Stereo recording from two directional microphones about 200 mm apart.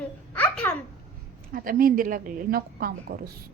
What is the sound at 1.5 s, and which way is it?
A woman's voice, 45° right (ahead or behind).